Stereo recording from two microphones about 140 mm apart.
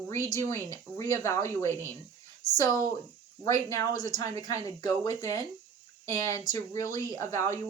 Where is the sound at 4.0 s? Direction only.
25° left (ahead or behind).